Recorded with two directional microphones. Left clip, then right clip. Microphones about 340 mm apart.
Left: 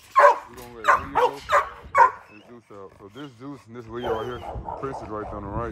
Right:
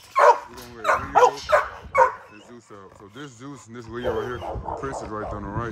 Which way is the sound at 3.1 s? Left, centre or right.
Centre.